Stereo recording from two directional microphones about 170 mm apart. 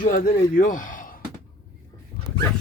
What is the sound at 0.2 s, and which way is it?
Speech, 50° left (ahead or behind).